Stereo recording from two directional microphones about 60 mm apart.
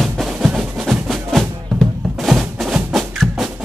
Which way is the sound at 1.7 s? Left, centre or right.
Centre.